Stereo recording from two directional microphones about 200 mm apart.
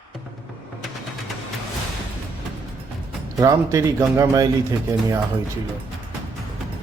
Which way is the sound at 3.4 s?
15° right (ahead or behind).